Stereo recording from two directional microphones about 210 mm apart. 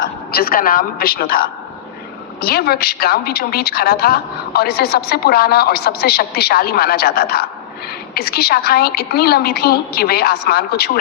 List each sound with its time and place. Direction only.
0.3 s a woman's voice: 45° left (ahead or behind)